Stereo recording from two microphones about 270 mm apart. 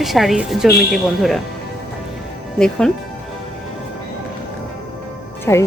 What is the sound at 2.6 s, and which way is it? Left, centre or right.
Speech, centre.